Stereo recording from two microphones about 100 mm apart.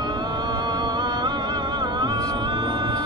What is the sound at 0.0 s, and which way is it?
Music, 45° right (ahead or behind).